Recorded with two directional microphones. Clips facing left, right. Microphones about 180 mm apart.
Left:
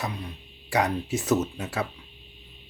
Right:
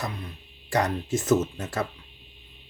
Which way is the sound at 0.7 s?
10° left (ahead or behind).